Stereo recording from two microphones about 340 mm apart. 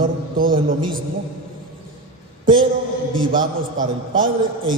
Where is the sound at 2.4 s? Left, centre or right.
Right.